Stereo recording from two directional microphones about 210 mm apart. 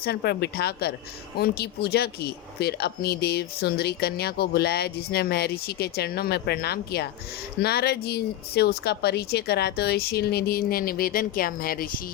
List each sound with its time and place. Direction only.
0.0 s speech: 50° left (ahead or behind)